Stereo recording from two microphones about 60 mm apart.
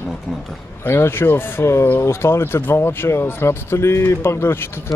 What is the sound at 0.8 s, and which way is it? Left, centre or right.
Speech, left.